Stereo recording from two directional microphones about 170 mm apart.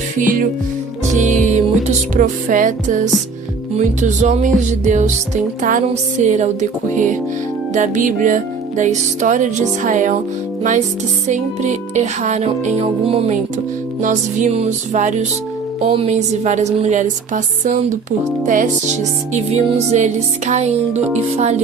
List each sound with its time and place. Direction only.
1.1 s music: 45° right (ahead or behind)
11.9 s music: 45° right (ahead or behind)
14.0 s music: 50° right (ahead or behind)
19.9 s music: 40° right (ahead or behind)